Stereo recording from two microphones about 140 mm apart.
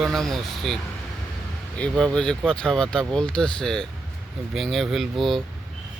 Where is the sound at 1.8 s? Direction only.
5° left (ahead or behind).